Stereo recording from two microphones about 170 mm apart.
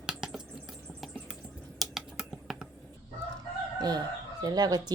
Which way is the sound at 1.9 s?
Centre (ahead or behind).